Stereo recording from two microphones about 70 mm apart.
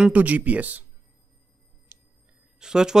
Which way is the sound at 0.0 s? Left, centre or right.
Right.